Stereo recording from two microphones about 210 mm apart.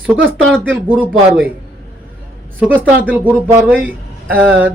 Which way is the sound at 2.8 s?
10° right (ahead or behind).